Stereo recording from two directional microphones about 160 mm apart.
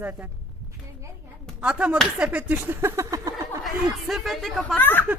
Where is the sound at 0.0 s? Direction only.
10° right (ahead or behind).